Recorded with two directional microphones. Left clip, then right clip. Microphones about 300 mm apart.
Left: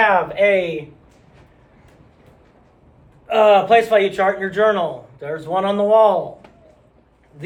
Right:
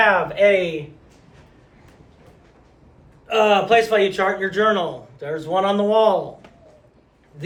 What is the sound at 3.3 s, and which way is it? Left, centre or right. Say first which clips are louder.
Speech: left 3 dB; left.